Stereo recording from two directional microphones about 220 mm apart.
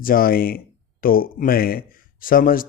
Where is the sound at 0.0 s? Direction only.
40° left (ahead or behind).